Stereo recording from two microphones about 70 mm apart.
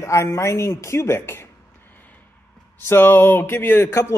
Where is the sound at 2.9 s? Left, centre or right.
Left.